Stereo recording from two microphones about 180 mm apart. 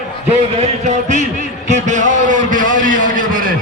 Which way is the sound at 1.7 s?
40° right (ahead or behind).